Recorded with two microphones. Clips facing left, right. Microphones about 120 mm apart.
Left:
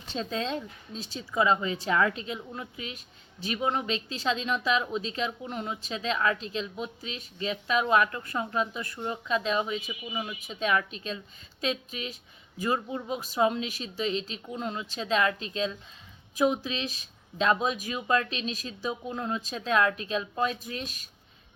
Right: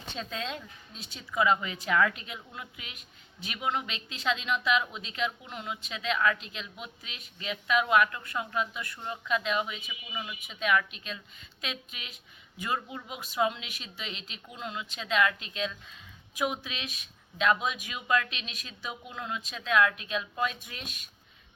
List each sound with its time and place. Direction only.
0.2 s speech: 35° left (ahead or behind)